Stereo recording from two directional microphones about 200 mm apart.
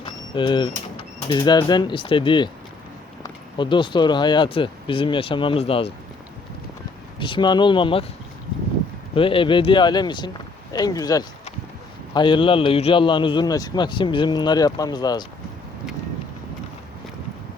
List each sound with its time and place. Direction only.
0.0 s bird: 25° left (ahead or behind)
0.9 s a man's voice: 20° left (ahead or behind)
3.6 s a man's voice: 25° left (ahead or behind)
7.2 s a man's voice: 25° left (ahead or behind)
9.1 s a man's voice: 25° left (ahead or behind)